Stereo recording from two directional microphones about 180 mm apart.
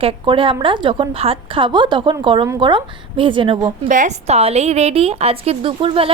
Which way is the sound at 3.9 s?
45° right (ahead or behind).